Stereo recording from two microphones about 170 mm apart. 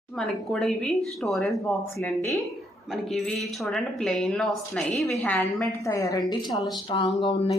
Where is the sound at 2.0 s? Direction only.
15° left (ahead or behind).